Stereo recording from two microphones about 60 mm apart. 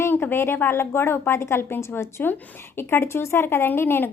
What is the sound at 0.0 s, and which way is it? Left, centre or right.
A woman's voice, left.